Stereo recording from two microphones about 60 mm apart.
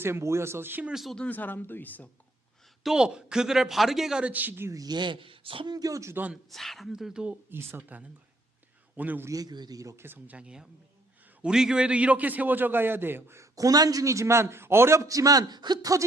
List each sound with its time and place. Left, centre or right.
0.0 s speech: right
1.3 s speech: left
2.8 s speech: centre
4.2 s a man's voice: right
5.7 s speech: right
6.5 s speech: centre
7.8 s a man's voice: right
9.3 s a man's voice: right
10.0 s speech: right
10.3 s a man's voice: centre; by 13.5 s right
13.6 s speech: right
15.0 s a man's voice: right